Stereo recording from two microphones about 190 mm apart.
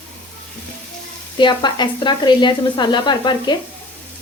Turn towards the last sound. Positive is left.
turn(degrees=25)  # may be behind; listen again after turning